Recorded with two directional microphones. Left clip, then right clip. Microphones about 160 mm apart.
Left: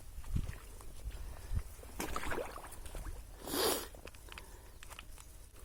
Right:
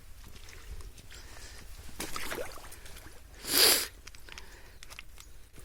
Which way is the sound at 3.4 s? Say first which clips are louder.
Right 10 dB; centre (ahead or behind).